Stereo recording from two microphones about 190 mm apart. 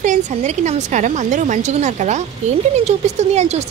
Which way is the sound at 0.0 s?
40° right (ahead or behind).